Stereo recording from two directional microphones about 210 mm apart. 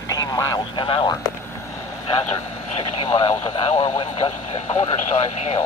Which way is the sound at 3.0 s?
25° left (ahead or behind).